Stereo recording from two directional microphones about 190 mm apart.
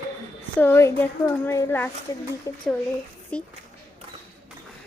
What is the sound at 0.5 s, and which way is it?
A woman's voice, 10° left (ahead or behind).